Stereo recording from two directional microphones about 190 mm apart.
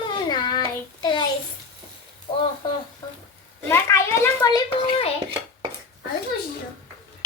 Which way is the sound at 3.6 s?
15° left (ahead or behind).